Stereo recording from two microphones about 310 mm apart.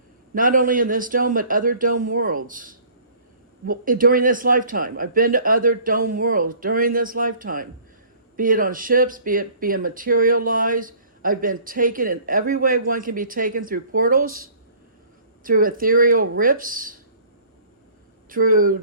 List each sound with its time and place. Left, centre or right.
0.3 s speech: right
15.4 s speech: right
18.3 s speech: right